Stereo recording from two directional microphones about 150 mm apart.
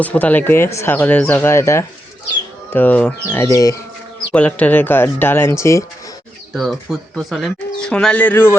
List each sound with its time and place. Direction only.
0.0 s speech: 10° left (ahead or behind)
3.4 s speech: 20° left (ahead or behind)
4.3 s speech: 10° left (ahead or behind)
6.5 s speech: centre (ahead or behind)